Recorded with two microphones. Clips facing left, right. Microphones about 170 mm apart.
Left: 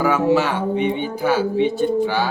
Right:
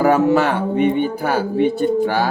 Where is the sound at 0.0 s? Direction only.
55° right (ahead or behind).